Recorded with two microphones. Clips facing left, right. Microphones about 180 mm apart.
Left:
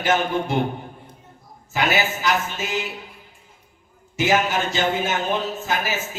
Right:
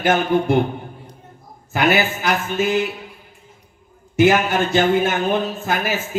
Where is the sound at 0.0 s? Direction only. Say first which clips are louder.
Right 4 dB; 55° right (ahead or behind).